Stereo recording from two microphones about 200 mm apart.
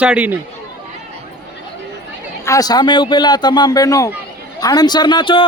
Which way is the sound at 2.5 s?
20° left (ahead or behind).